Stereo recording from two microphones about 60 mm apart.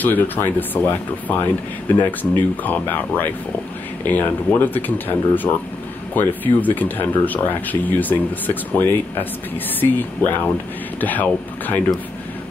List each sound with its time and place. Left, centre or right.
0.0 s speech: left